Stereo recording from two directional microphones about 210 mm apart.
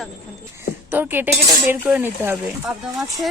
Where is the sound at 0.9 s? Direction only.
10° right (ahead or behind).